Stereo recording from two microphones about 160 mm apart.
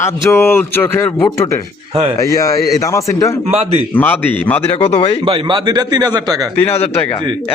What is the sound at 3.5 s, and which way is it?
Speech, 40° right (ahead or behind).